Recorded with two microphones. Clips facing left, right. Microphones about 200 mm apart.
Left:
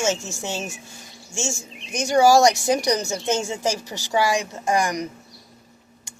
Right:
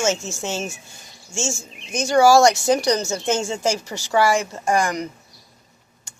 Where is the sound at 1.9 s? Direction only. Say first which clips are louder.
Right 2 dB; 15° left (ahead or behind).